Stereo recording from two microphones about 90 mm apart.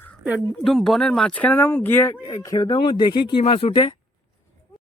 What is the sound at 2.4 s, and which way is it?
Speech, 45° left (ahead or behind).